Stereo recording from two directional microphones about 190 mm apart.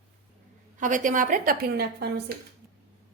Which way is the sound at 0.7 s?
40° right (ahead or behind).